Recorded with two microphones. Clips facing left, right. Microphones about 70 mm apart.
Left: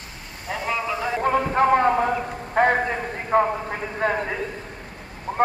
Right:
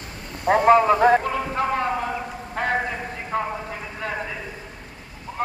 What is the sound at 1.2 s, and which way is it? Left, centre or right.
A man's voice, left.